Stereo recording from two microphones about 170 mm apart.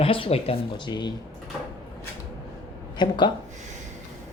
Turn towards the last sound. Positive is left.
turn(degrees=25)  # may be behind; listen again after turning